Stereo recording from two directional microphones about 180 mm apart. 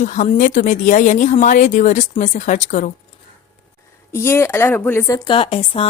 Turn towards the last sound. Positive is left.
turn(degrees=30)  # may be behind; listen again after turning